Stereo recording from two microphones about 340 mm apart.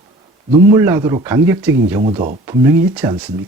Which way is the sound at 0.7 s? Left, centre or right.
Centre.